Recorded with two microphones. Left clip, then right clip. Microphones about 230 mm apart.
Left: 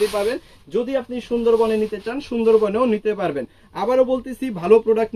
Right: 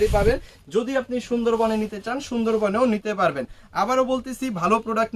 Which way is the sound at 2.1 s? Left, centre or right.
Centre.